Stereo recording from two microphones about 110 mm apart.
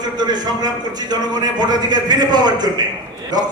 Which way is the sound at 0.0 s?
40° right (ahead or behind).